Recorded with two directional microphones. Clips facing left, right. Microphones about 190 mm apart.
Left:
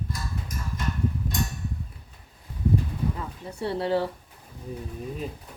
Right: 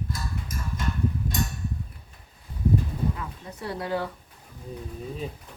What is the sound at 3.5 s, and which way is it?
Speech, 30° left (ahead or behind).